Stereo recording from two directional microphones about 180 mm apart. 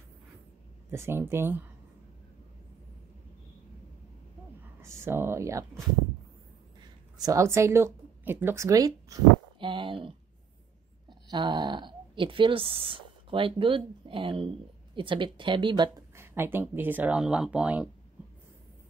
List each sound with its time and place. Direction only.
0.9 s speech: 15° right (ahead or behind)
4.8 s speech: 15° right (ahead or behind)
7.2 s a woman's voice: 20° right (ahead or behind)
16.2 s speech: 15° right (ahead or behind)